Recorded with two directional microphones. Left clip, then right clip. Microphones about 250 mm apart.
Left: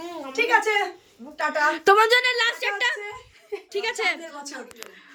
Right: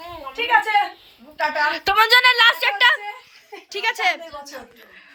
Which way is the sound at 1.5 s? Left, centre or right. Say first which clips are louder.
Left 3 dB; centre.